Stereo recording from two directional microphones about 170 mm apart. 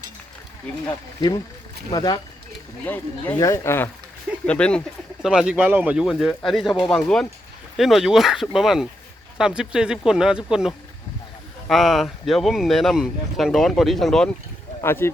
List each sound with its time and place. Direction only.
0.9 s speech: 25° left (ahead or behind)
2.8 s speech: 10° left (ahead or behind)
14.8 s speech: 15° left (ahead or behind)